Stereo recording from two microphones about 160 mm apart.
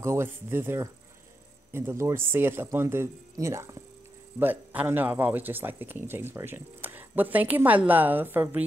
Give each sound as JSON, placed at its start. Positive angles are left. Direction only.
{"t": 0.0, "sound": "speech", "side_deg": -15}